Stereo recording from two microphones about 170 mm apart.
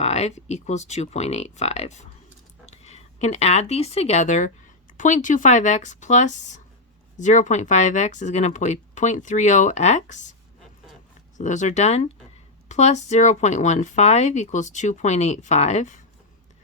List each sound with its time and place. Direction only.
0.0 s speech: 40° left (ahead or behind)
11.3 s speech: 45° left (ahead or behind)